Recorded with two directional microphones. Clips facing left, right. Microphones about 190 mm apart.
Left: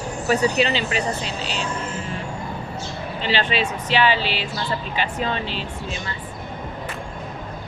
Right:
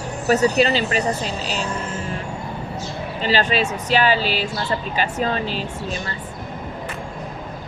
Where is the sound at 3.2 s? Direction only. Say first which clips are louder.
Right 3 dB; 40° right (ahead or behind).